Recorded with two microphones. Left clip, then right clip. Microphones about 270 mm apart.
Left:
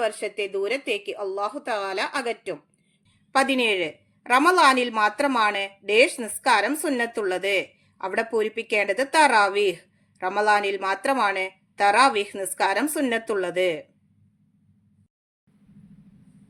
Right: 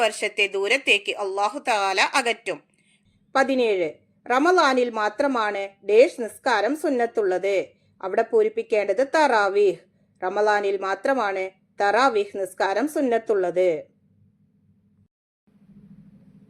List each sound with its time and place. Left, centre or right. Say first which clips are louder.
0.0 s speech: right 4 dB; centre
3.3 s a woman's voice: right 1 dB; centre